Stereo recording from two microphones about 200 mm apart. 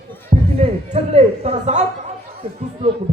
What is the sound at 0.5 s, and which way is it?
A man's voice, 30° right (ahead or behind).